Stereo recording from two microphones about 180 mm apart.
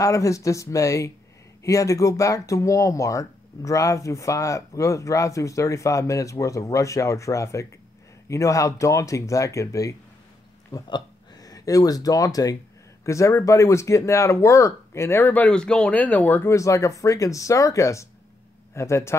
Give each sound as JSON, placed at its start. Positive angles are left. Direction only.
{"t": 0.0, "sound": "speech", "side_deg": 20}